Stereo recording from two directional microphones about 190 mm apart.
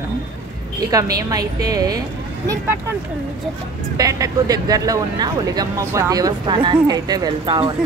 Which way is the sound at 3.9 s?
20° right (ahead or behind).